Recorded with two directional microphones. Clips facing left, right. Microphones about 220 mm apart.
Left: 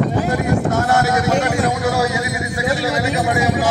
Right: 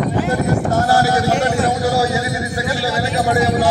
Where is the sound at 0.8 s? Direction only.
35° right (ahead or behind).